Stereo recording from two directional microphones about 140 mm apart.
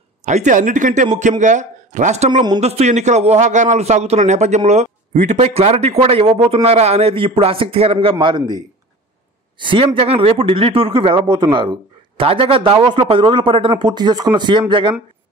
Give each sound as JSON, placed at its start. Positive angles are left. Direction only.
{"t": 0.2, "sound": "a man's voice", "side_deg": -55}